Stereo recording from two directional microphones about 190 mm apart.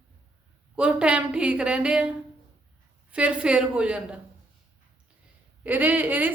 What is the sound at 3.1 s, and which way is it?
A woman's voice, 5° right (ahead or behind).